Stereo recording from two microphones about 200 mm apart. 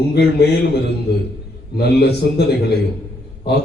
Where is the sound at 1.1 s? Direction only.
60° left (ahead or behind).